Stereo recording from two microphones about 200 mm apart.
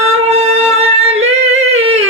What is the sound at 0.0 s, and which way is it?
Music, 30° right (ahead or behind).